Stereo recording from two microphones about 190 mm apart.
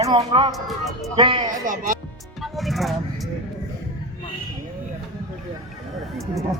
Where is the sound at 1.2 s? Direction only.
25° right (ahead or behind).